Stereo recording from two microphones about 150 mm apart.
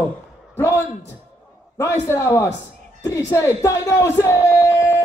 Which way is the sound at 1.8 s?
20° left (ahead or behind).